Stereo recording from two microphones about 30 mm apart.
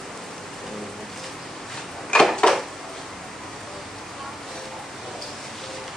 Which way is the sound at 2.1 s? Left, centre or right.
Left.